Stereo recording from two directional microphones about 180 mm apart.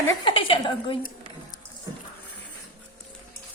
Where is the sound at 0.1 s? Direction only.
30° left (ahead or behind).